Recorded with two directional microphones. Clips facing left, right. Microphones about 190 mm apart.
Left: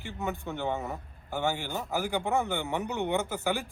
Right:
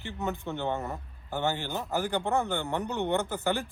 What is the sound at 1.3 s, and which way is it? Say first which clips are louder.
A man's voice: even; 15° left (ahead or behind).